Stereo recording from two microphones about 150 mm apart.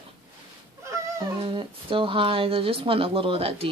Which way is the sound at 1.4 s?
35° right (ahead or behind).